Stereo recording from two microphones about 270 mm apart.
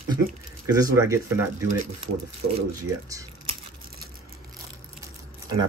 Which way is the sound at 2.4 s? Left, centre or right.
Right.